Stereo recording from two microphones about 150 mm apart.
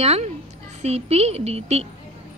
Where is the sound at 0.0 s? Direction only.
45° right (ahead or behind).